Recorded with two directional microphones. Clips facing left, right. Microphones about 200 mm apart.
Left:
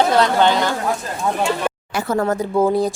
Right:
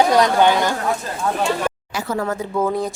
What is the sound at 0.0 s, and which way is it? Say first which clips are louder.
Speech: right 1 dB; 15° right (ahead or behind).